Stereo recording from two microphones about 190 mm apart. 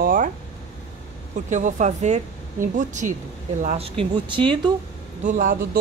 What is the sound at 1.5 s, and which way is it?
Speech, 40° right (ahead or behind).